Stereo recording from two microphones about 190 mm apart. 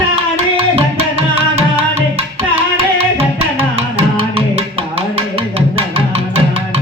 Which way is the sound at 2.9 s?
30° right (ahead or behind).